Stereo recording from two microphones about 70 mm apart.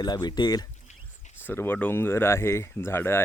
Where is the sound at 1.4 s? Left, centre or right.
Left.